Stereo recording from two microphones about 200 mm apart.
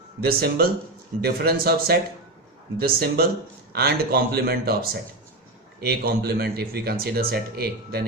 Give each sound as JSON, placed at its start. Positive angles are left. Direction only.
{"t": 0.2, "sound": "speech", "side_deg": -50}